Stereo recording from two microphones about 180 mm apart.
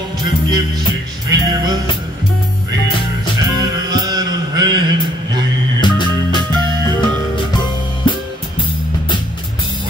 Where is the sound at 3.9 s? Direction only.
20° right (ahead or behind).